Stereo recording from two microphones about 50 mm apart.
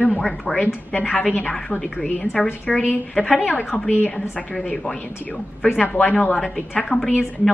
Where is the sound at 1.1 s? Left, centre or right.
Left.